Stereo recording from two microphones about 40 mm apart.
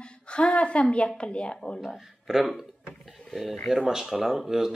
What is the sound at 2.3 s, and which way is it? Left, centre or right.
Speech, centre.